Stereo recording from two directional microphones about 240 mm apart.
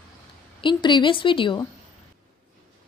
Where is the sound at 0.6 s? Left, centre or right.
Centre.